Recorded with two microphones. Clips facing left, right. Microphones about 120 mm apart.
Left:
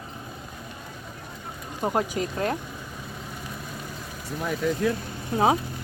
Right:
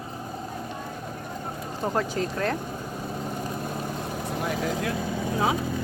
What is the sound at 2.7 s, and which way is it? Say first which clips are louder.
Vehicle: right 6 dB; 45° right (ahead or behind).